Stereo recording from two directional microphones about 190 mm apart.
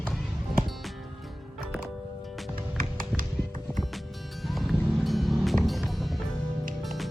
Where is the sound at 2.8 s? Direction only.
45° right (ahead or behind).